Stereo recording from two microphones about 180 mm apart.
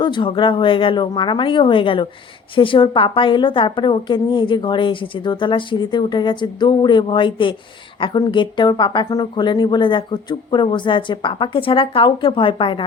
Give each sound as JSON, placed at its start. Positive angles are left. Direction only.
{"t": 0.0, "sound": "a woman's voice", "side_deg": 25}